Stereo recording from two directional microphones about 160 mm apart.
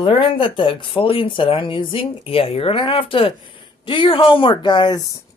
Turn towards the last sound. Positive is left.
turn(degrees=30)  # may be behind; listen again after turning